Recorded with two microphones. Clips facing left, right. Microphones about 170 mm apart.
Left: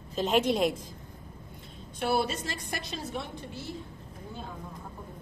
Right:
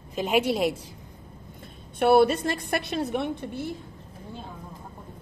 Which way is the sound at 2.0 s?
60° right (ahead or behind).